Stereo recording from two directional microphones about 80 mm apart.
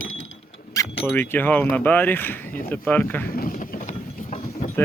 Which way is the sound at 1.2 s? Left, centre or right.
Left.